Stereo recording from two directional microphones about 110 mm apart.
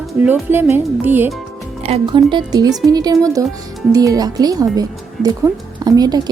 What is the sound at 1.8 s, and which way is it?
Speech, 70° right (ahead or behind).